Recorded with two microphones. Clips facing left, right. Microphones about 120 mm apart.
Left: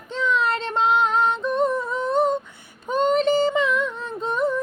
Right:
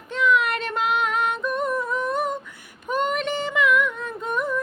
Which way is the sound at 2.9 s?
30° left (ahead or behind).